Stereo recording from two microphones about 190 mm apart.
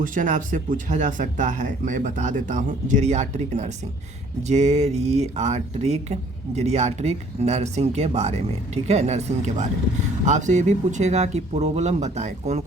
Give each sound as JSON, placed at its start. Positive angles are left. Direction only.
{"t": 0.0, "sound": "speech", "side_deg": -45}